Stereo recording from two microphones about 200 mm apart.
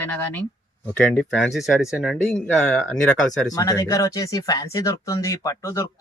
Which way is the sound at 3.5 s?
15° left (ahead or behind).